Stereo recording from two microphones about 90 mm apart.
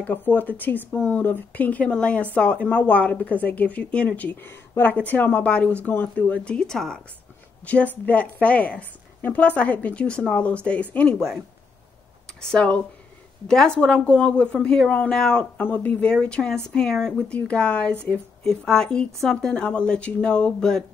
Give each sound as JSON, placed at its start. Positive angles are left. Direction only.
{"t": 0.0, "sound": "speech", "side_deg": 20}
{"t": 7.6, "sound": "speech", "side_deg": 15}
{"t": 12.4, "sound": "speech", "side_deg": 10}
{"t": 15.5, "sound": "speech", "side_deg": 20}